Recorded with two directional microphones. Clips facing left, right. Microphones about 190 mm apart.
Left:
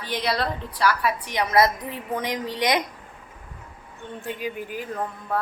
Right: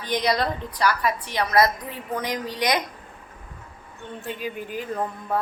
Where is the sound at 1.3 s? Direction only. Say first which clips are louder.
Left 1 dB; 20° left (ahead or behind).